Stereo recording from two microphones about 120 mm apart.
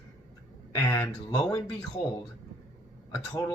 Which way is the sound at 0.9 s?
20° left (ahead or behind).